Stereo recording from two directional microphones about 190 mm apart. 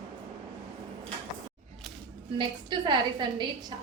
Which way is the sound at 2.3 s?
25° right (ahead or behind).